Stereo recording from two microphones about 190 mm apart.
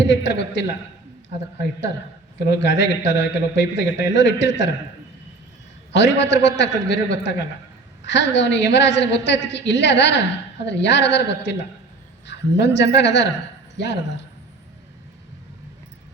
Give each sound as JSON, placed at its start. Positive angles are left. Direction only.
{"t": 0.0, "sound": "a woman's voice", "side_deg": 70}
{"t": 2.5, "sound": "a woman's voice", "side_deg": 70}
{"t": 5.9, "sound": "a woman's voice", "side_deg": 70}